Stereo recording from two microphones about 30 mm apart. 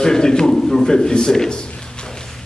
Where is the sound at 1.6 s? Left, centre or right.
Left.